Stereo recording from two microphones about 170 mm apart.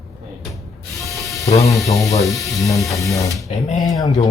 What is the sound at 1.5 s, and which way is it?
Speech, 20° left (ahead or behind).